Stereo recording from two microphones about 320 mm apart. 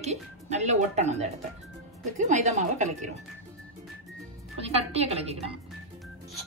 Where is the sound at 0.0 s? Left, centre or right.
Right.